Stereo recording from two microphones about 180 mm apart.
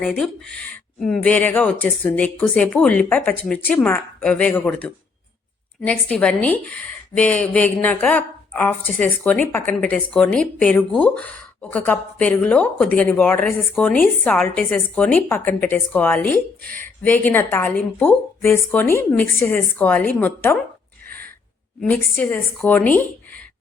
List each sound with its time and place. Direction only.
0.0 s speech: 5° left (ahead or behind)
16.6 s speech: 50° right (ahead or behind)
17.0 s speech: 10° left (ahead or behind)
21.8 s speech: 10° left (ahead or behind)